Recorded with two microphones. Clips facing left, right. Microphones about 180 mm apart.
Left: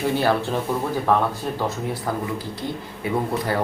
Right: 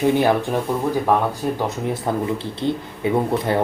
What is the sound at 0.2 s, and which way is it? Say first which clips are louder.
Speech: right 3 dB; 15° right (ahead or behind).